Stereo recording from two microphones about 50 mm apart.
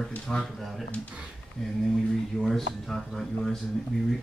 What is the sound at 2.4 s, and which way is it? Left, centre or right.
Speech, centre.